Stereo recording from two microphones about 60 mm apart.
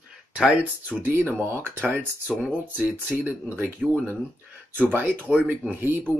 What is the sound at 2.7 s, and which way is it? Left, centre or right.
Speech, right.